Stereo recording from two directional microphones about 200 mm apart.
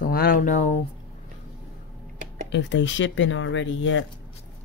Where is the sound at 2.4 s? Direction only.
60° left (ahead or behind).